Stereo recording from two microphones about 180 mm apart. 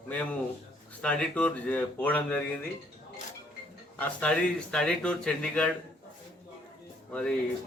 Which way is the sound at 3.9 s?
5° left (ahead or behind).